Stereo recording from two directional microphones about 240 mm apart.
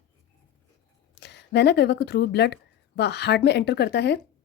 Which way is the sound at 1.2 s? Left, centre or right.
Left.